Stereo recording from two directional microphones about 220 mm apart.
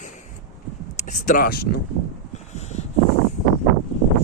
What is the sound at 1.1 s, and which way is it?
Speech, 40° left (ahead or behind).